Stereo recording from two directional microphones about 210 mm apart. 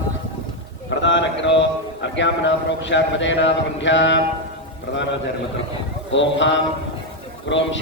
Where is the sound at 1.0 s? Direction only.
60° left (ahead or behind).